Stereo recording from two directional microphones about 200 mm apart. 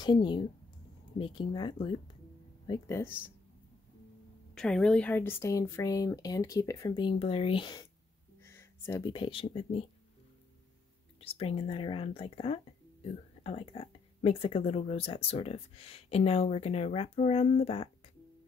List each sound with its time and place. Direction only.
0.0 s speech: 20° left (ahead or behind)
4.6 s speech: 5° left (ahead or behind); by 7.9 s 20° left (ahead or behind)
8.5 s a sound: 10° left (ahead or behind)
9.1 s speech: 25° left (ahead or behind)
11.1 s speech: 30° left (ahead or behind)